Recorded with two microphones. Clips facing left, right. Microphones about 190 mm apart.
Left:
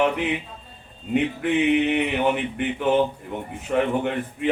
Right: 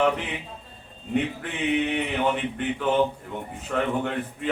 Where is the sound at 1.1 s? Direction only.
20° left (ahead or behind).